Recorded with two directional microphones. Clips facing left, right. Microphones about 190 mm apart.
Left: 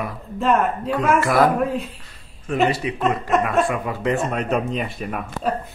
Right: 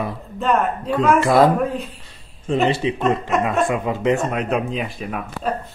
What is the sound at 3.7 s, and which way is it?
Speech, 20° right (ahead or behind).